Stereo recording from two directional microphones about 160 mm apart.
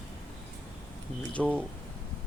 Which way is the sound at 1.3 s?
10° left (ahead or behind).